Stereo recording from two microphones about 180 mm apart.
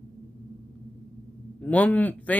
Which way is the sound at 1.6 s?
10° left (ahead or behind).